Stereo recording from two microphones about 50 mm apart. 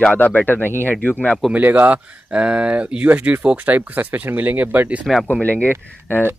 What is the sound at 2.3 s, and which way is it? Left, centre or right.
Speech, right.